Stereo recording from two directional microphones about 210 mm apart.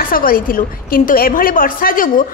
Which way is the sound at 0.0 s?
45° left (ahead or behind).